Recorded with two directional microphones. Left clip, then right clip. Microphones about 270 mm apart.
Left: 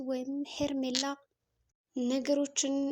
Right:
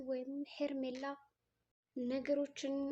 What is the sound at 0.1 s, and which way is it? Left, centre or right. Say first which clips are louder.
Speech: left 5 dB; left.